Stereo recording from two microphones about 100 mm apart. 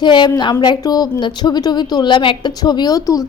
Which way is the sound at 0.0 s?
50° left (ahead or behind).